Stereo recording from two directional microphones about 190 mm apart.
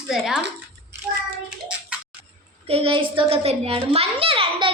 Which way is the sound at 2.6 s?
30° right (ahead or behind).